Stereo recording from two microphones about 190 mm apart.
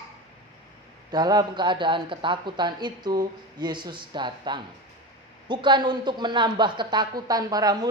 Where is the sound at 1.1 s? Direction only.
20° right (ahead or behind).